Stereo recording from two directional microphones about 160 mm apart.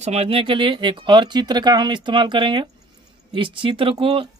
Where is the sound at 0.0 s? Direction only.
40° right (ahead or behind).